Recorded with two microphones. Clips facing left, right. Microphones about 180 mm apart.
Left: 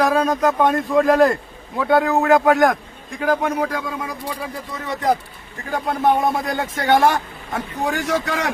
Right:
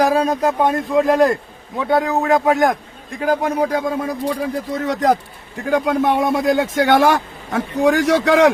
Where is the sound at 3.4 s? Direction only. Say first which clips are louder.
Right 4 dB; 35° right (ahead or behind); by 5.1 s 75° right (ahead or behind).